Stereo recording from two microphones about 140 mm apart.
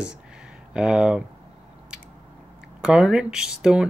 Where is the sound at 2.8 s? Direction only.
5° right (ahead or behind).